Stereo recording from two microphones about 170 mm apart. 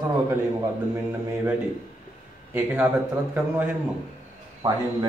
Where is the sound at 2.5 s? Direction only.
10° right (ahead or behind).